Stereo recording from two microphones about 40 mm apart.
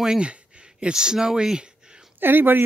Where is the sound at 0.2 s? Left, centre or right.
Right.